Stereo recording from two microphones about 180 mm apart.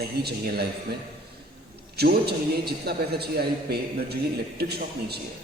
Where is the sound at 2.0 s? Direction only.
60° right (ahead or behind).